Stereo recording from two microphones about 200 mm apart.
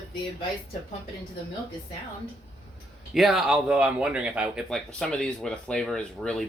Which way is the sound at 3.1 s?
Centre (ahead or behind).